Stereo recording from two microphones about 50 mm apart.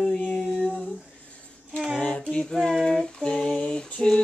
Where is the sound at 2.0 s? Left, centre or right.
Left.